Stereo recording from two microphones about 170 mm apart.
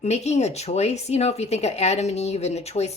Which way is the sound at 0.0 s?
40° left (ahead or behind).